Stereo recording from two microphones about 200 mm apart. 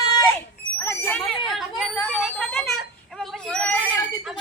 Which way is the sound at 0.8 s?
10° left (ahead or behind).